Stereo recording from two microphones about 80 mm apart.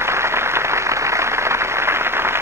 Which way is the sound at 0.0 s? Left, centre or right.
Right.